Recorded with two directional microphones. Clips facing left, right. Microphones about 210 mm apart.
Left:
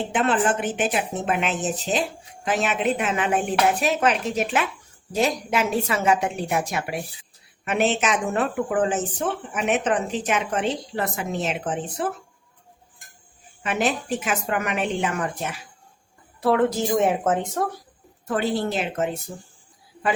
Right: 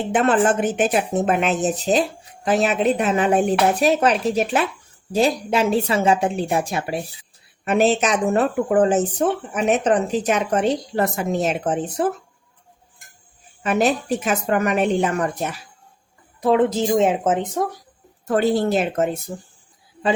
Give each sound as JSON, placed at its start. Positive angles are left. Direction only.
{"t": 0.1, "sound": "speech", "side_deg": -45}
{"t": 13.6, "sound": "speech", "side_deg": -40}
{"t": 16.4, "sound": "speech", "side_deg": -20}
{"t": 18.3, "sound": "speech", "side_deg": -45}